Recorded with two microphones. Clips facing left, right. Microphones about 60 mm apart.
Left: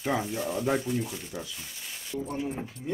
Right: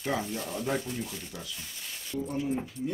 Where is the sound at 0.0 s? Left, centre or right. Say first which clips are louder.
Left 3 dB; centre.